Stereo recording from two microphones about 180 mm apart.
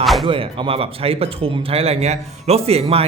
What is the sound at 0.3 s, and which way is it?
Speech, 30° right (ahead or behind).